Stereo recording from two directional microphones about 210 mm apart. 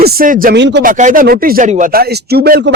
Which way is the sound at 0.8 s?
40° right (ahead or behind).